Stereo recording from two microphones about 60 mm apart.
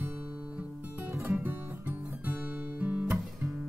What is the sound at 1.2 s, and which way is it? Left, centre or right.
Guitar, right.